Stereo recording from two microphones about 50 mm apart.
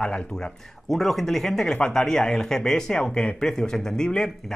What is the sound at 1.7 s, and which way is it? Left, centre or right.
Speech, centre.